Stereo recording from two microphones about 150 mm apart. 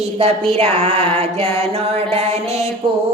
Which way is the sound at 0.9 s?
15° left (ahead or behind).